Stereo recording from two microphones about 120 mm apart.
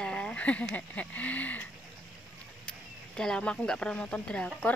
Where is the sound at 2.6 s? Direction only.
5° left (ahead or behind).